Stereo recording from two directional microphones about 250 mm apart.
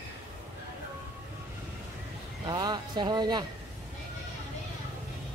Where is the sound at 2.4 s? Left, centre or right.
Centre.